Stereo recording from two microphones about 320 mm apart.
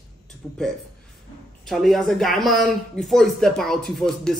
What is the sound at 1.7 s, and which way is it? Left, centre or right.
A man's voice, centre.